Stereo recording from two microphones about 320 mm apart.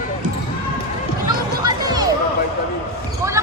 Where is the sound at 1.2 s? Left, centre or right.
Centre.